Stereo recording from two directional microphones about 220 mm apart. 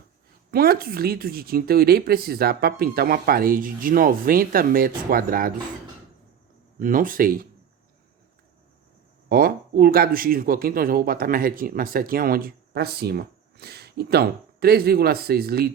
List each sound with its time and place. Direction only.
0.5 s speech: 45° right (ahead or behind)
6.7 s speech: 40° right (ahead or behind)
9.3 s speech: 40° right (ahead or behind)